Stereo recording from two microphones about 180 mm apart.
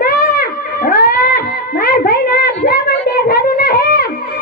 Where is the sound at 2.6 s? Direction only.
60° left (ahead or behind).